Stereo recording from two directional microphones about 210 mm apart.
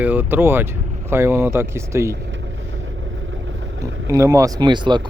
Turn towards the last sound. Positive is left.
turn(degrees=-20)  # may be behind; listen again after turning